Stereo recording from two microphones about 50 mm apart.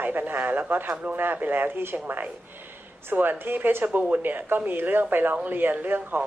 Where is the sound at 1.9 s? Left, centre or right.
Right.